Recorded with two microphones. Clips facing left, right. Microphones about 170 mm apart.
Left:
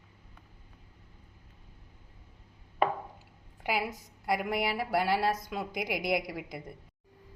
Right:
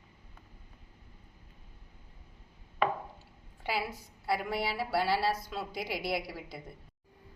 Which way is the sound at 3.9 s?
15° left (ahead or behind).